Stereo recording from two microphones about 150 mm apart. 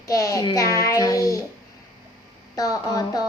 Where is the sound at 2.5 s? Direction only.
20° left (ahead or behind).